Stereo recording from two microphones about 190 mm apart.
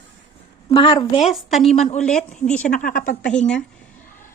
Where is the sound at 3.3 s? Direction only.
5° left (ahead or behind).